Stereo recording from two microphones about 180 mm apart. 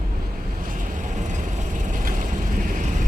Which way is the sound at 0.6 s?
50° right (ahead or behind).